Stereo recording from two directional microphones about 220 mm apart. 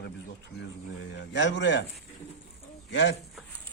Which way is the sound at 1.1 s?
55° left (ahead or behind).